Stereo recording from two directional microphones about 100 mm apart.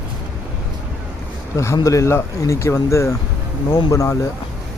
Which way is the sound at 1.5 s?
30° left (ahead or behind).